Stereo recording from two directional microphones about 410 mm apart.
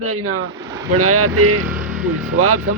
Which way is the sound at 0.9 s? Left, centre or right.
Right.